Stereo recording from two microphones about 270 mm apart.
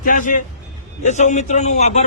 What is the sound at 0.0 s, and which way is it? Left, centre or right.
Speech, left.